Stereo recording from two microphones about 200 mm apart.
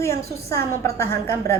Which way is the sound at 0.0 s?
15° left (ahead or behind).